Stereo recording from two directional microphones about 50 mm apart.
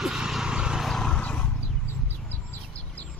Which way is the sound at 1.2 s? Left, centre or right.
Left.